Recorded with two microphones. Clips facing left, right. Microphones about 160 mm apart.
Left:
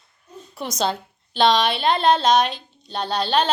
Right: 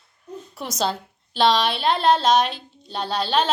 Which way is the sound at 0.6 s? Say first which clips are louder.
Left 1 dB; 5° right (ahead or behind).